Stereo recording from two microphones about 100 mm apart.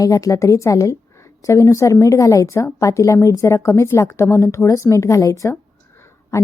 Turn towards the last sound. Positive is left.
turn(degrees=25)  # may be behind; listen again after turning